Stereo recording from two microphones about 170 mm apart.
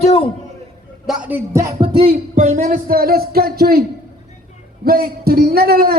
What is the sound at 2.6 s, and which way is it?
A man's voice, 55° right (ahead or behind).